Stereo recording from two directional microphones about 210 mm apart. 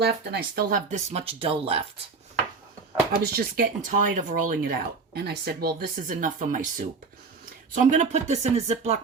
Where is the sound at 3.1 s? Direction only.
45° right (ahead or behind); by 8.9 s 30° right (ahead or behind).